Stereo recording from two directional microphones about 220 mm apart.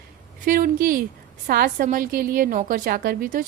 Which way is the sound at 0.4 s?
40° right (ahead or behind).